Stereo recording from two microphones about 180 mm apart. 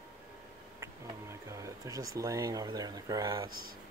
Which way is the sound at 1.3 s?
15° right (ahead or behind).